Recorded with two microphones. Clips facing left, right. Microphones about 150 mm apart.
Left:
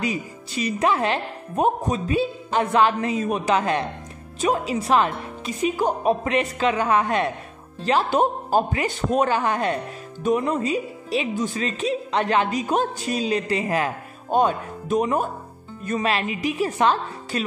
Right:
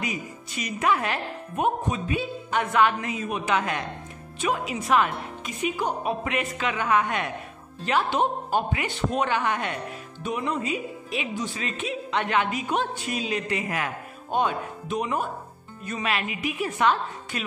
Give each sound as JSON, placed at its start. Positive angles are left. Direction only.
{"t": 0.0, "sound": "speech", "side_deg": 30}
{"t": 16.1, "sound": "speech", "side_deg": 35}